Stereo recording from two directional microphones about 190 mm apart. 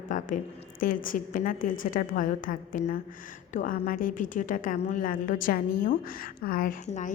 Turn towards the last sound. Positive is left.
turn(degrees=40)  # may be behind; listen again after turning